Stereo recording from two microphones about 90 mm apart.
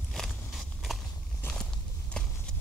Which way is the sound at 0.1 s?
Centre (ahead or behind).